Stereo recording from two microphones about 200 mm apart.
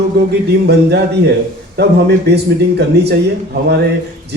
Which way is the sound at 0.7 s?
55° right (ahead or behind).